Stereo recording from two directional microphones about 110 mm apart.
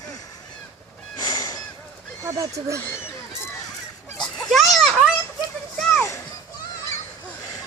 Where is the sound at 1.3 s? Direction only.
40° left (ahead or behind).